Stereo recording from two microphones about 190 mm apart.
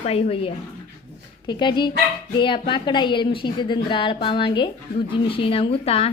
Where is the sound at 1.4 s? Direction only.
25° left (ahead or behind).